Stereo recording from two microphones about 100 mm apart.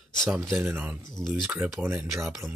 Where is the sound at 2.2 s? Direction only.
5° right (ahead or behind).